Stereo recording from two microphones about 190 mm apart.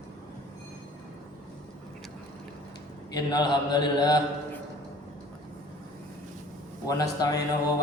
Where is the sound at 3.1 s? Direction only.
20° left (ahead or behind).